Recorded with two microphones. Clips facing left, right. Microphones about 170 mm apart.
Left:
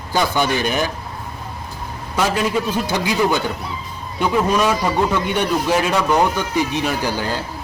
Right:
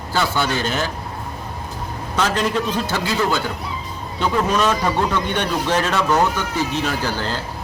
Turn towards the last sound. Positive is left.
turn(degrees=15)  # may be behind; listen again after turning